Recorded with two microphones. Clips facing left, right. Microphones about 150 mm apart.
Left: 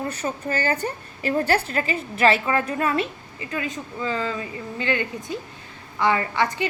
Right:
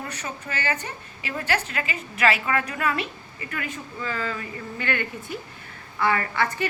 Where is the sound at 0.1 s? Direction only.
35° left (ahead or behind).